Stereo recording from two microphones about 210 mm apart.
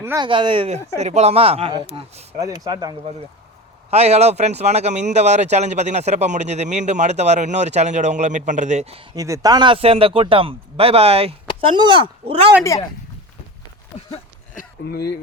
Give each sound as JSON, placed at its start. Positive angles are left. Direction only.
{"t": 0.0, "sound": "speech", "side_deg": -10}
{"t": 0.3, "sound": "speech", "side_deg": -25}
{"t": 3.8, "sound": "speech", "side_deg": -30}
{"t": 9.1, "sound": "speech", "side_deg": -15}
{"t": 14.5, "sound": "a sound", "side_deg": 45}